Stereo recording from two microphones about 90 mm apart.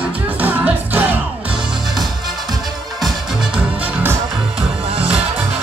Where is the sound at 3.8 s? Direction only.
20° right (ahead or behind).